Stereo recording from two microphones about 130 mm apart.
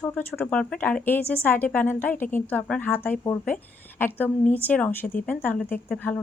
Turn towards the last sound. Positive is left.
turn(degrees=15)  # may be behind; listen again after turning